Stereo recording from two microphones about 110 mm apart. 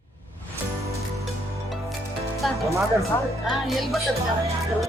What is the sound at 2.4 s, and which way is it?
Speech, centre (ahead or behind).